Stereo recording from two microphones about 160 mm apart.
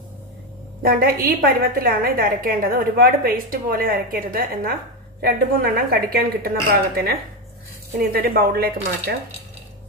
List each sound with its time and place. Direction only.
0.8 s a woman's voice: 65° right (ahead or behind)